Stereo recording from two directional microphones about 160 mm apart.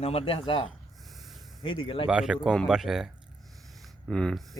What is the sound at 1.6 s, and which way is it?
Speech, 30° left (ahead or behind).